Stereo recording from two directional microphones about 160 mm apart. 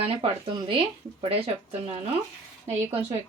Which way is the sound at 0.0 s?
35° right (ahead or behind).